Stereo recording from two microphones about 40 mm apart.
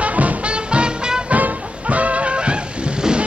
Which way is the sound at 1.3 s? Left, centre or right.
Right.